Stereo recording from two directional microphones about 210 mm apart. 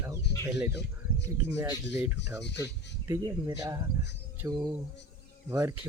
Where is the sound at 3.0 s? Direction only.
15° right (ahead or behind).